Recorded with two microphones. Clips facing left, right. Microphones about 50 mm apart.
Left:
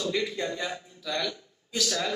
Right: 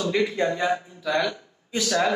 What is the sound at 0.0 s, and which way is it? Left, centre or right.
A man's voice, right.